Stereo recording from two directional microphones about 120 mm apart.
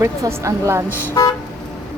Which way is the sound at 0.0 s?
25° right (ahead or behind).